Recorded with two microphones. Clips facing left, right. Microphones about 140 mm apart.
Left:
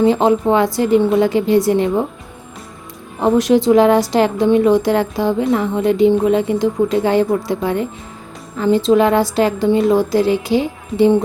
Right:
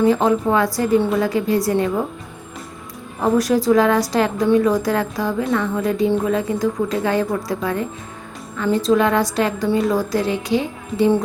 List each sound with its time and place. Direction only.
0.0 s a woman's voice: 25° left (ahead or behind)
3.2 s a woman's voice: 25° left (ahead or behind)